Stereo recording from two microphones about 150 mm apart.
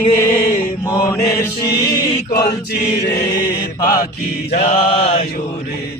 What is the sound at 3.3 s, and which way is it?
Mantra, 70° left (ahead or behind).